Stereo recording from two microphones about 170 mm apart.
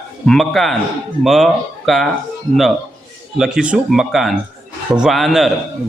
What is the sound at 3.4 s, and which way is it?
A man's voice, 5° right (ahead or behind).